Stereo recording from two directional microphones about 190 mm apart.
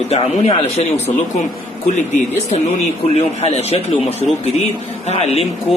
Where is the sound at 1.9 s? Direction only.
40° left (ahead or behind).